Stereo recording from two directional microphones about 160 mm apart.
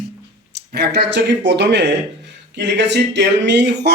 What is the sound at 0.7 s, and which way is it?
A man's voice, 90° right.